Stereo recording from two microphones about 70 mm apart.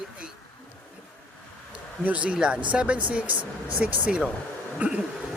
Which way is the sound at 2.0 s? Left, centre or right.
Centre.